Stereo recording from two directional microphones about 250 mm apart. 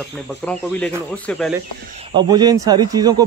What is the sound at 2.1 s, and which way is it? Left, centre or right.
Speech, centre.